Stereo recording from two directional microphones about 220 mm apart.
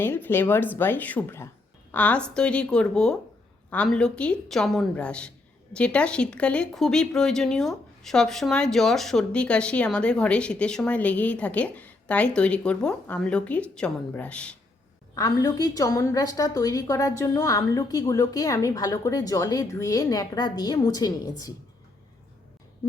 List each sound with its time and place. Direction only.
0.0 s a woman's voice: 10° left (ahead or behind)
15.1 s a woman's voice: 15° left (ahead or behind)